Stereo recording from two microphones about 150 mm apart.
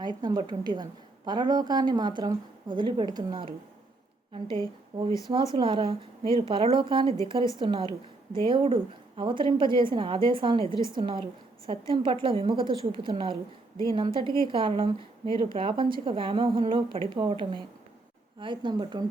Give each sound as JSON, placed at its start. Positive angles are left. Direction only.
{"t": 0.2, "sound": "a woman's voice", "side_deg": -30}
{"t": 4.9, "sound": "a woman's voice", "side_deg": -30}